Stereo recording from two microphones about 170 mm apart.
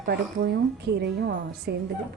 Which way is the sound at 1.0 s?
85° right.